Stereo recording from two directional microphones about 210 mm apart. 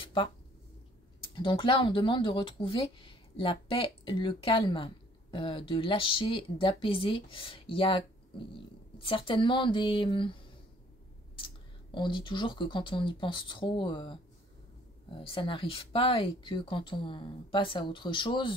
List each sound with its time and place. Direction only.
0.0 s a sound: 25° left (ahead or behind)
1.2 s speech: 25° left (ahead or behind)
11.3 s speech: 25° left (ahead or behind)